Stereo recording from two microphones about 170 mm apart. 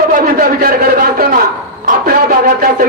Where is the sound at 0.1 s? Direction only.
55° right (ahead or behind).